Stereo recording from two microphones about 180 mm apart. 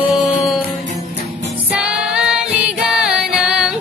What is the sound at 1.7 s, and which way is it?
Singing, 5° right (ahead or behind).